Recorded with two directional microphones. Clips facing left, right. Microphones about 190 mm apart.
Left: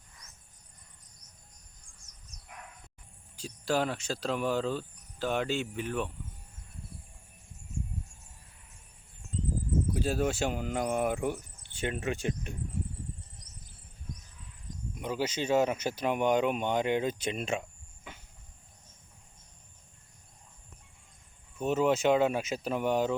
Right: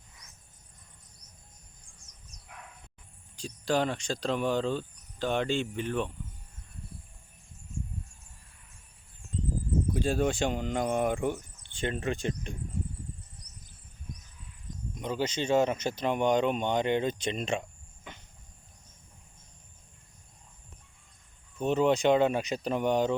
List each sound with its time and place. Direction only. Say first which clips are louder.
3.3 s speech: right 2 dB; 5° left (ahead or behind)
9.9 s speech: right 3 dB; 5° left (ahead or behind)
14.9 s speech: right 1 dB; 10° left (ahead or behind)
21.6 s speech: right 2 dB; 5° left (ahead or behind)